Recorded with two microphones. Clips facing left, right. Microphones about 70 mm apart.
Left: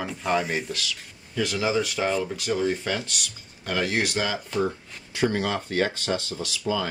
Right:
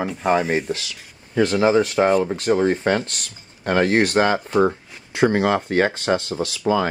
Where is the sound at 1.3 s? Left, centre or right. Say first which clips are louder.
Right 8 dB; right.